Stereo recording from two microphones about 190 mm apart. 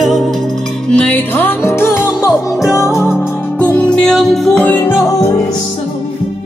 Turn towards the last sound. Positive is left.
turn(degrees=15)  # may be behind; listen again after turning